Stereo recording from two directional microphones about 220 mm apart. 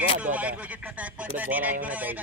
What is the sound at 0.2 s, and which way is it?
Speech, 5° right (ahead or behind).